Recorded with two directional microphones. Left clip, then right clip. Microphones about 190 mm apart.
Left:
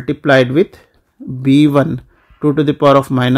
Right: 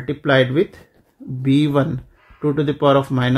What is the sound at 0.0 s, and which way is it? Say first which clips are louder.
Speech: left 5 dB; 50° left (ahead or behind).